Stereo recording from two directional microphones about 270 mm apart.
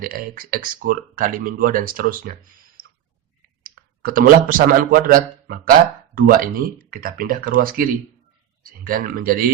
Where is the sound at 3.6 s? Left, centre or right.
Right.